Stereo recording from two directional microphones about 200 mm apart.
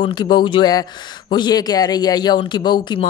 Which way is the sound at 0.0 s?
20° left (ahead or behind).